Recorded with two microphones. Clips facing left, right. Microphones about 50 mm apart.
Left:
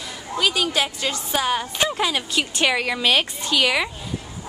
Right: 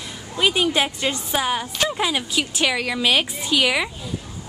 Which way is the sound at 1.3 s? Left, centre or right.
Centre.